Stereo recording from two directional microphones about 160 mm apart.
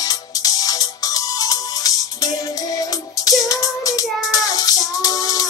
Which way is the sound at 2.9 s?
25° left (ahead or behind).